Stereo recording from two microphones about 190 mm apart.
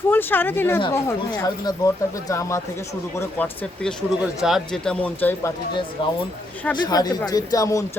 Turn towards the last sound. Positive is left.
turn(degrees=15)  # may be behind; listen again after turning